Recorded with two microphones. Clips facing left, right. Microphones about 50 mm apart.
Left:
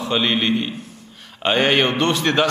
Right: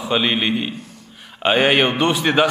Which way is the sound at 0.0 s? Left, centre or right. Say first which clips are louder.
Even; centre.